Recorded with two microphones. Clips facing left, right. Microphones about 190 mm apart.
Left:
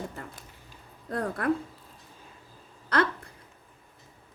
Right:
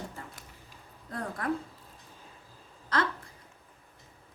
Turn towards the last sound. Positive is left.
turn(degrees=60)  # may be behind; listen again after turning